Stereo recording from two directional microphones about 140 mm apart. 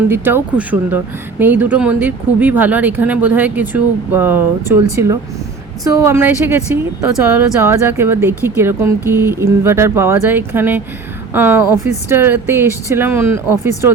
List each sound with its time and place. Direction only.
0.1 s speech: 15° right (ahead or behind)